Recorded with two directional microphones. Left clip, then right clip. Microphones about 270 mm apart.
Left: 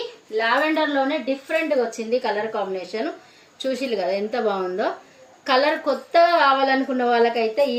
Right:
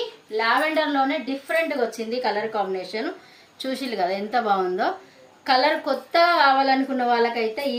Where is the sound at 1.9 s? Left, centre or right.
Centre.